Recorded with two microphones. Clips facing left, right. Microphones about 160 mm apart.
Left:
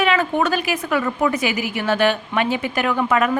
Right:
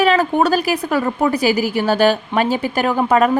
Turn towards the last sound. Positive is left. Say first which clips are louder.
# right 4 dB
turn(degrees=-35)  # may be behind; listen again after turning